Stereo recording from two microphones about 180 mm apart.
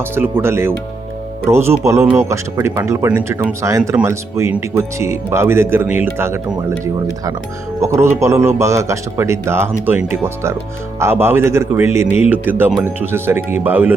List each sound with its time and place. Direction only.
0.2 s speech: 15° right (ahead or behind)